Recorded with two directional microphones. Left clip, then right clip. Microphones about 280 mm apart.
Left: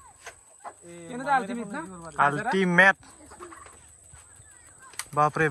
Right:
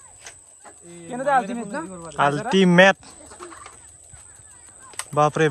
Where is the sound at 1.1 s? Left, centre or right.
Right.